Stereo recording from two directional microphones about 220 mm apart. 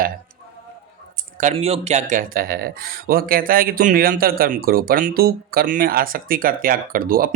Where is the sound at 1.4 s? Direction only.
30° right (ahead or behind).